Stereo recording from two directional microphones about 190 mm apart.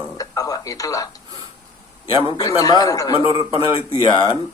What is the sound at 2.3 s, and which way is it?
A man's voice, 20° left (ahead or behind).